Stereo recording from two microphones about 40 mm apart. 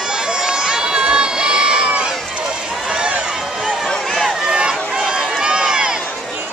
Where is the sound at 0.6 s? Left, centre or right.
Centre.